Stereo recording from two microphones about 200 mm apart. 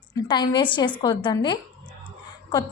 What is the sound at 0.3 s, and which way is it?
A woman's voice, 20° left (ahead or behind).